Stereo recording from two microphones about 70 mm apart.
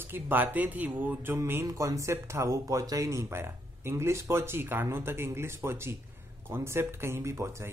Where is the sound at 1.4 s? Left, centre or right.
Right.